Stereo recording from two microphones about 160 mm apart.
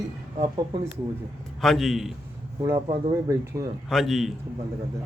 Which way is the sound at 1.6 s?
Centre (ahead or behind).